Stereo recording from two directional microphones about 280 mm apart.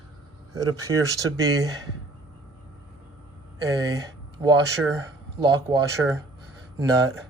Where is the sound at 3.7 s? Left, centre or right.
Centre.